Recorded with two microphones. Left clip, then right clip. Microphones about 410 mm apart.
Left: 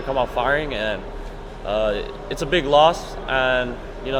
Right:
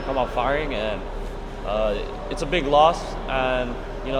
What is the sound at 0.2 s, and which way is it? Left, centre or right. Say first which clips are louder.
Speech: left 3 dB; left.